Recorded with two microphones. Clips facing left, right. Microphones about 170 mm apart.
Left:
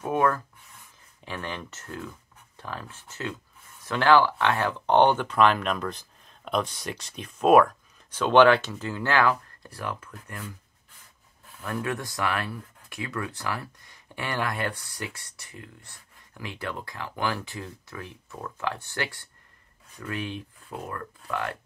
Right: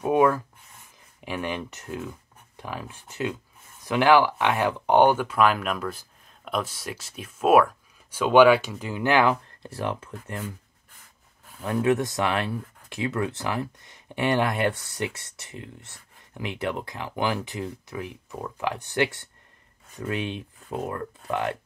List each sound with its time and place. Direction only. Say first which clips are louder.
0.0 s speech: right 4 dB; 15° right (ahead or behind)
11.6 s speech: right 8 dB; 20° right (ahead or behind)